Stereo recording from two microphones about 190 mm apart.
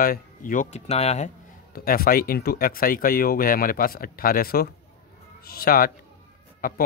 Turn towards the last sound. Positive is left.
turn(degrees=50)  # may be behind; listen again after turning